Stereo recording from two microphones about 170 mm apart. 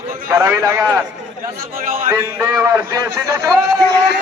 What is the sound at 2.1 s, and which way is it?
A man's voice, 15° right (ahead or behind).